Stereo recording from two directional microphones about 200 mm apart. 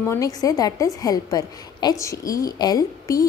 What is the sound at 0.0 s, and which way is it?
A woman's voice, 15° left (ahead or behind).